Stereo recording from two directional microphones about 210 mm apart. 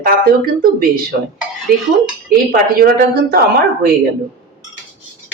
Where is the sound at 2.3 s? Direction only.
45° right (ahead or behind).